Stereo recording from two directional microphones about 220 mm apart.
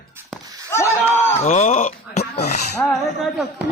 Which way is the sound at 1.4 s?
30° left (ahead or behind).